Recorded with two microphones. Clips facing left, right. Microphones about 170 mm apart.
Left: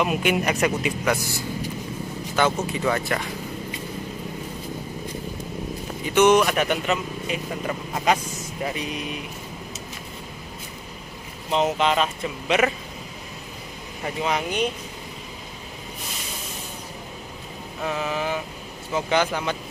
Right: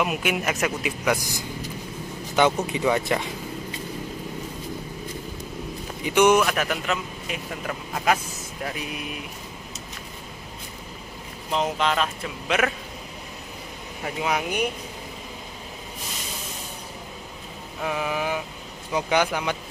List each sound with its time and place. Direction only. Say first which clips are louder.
0.0 s speech: left 3 dB; 5° right (ahead or behind)
1.1 s speech: left 1 dB; 15° right (ahead or behind)
6.0 s speech: left 1 dB; 10° right (ahead or behind)
6.4 s speech: left 3 dB; centre (ahead or behind)
11.5 s speech: left 3 dB; 5° left (ahead or behind)
14.0 s speech: left 1 dB; 10° right (ahead or behind)
17.8 s speech: even; 10° right (ahead or behind)